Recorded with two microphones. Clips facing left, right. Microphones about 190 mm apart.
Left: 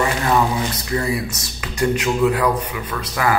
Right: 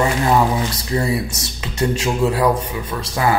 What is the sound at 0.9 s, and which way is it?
Speech, 25° right (ahead or behind).